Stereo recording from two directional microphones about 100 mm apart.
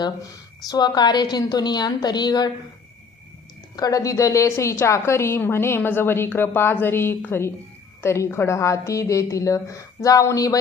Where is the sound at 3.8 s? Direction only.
35° left (ahead or behind).